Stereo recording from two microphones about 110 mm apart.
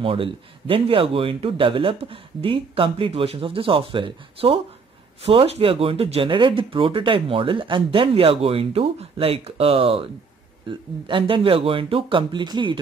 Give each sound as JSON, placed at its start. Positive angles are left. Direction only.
{"t": 0.0, "sound": "speech", "side_deg": -55}